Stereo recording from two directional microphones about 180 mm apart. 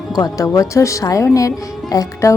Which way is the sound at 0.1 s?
20° left (ahead or behind).